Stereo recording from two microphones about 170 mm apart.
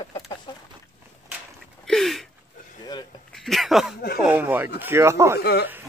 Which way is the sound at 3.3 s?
Centre (ahead or behind).